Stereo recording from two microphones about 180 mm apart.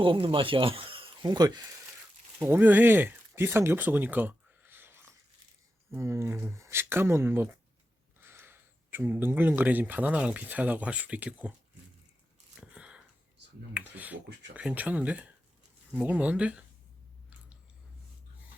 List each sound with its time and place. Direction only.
0.0 s speech: 30° right (ahead or behind)
2.4 s speech: 10° right (ahead or behind)
12.5 s a sound: 5° right (ahead or behind)
14.5 s speech: 10° right (ahead or behind)